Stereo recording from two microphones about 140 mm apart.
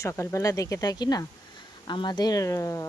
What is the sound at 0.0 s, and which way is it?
A woman's voice, 20° left (ahead or behind).